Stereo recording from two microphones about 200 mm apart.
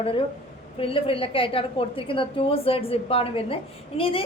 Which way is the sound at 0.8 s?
30° left (ahead or behind).